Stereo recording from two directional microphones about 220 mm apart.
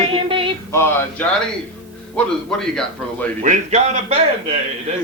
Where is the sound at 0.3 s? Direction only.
25° right (ahead or behind).